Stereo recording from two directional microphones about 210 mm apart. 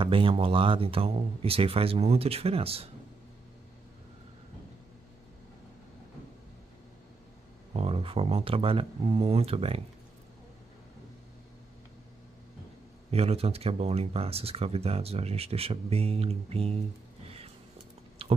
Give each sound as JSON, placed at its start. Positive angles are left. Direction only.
{"t": 0.0, "sound": "speech", "side_deg": -25}
{"t": 7.7, "sound": "speech", "side_deg": -25}
{"t": 13.1, "sound": "speech", "side_deg": -30}
{"t": 18.2, "sound": "a sound", "side_deg": -25}